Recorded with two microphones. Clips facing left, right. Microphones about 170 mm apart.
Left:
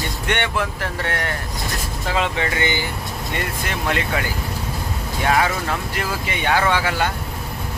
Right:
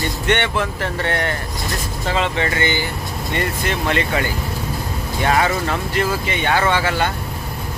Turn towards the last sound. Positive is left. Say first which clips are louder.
# right 2 dB
turn(degrees=5)  # may be behind; listen again after turning